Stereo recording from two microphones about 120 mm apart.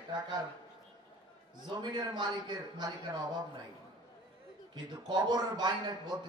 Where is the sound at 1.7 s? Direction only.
35° right (ahead or behind).